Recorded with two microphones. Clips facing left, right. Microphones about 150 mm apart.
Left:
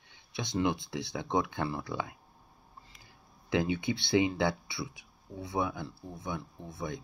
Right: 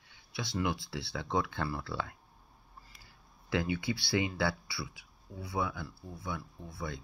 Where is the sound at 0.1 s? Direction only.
20° left (ahead or behind).